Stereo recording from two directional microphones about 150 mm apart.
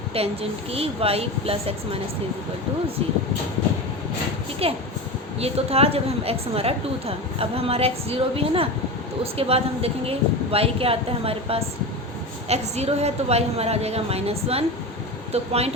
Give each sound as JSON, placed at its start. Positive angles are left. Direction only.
{"t": 0.1, "sound": "a woman's voice", "side_deg": -40}
{"t": 4.6, "sound": "a woman's voice", "side_deg": -40}